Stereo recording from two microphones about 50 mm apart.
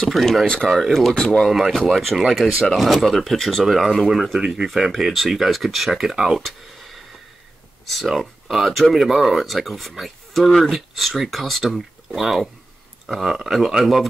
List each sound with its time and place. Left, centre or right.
0.0 s speech: centre
1.1 s speech: centre
1.7 s speech: centre
2.6 s speech: centre
6.4 s speech: centre